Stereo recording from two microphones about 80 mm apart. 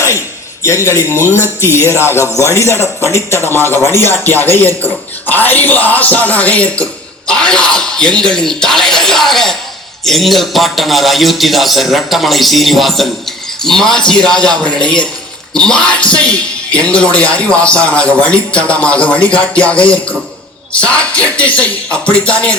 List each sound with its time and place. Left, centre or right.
0.6 s speech: left
1.0 s speech: right
1.3 s speech: left; by 22.5 s centre